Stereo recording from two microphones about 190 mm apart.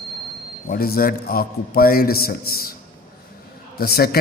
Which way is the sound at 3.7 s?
55° left (ahead or behind).